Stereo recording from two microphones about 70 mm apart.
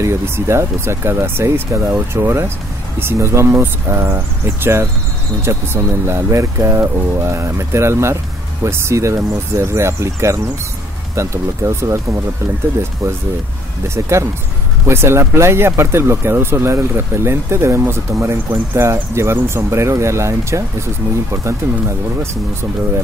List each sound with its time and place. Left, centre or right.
0.0 s speech: right